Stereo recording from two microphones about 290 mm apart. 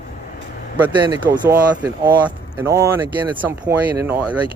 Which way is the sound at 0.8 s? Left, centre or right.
Centre.